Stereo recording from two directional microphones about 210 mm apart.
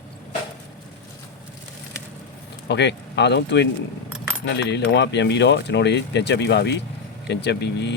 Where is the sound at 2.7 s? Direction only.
55° left (ahead or behind).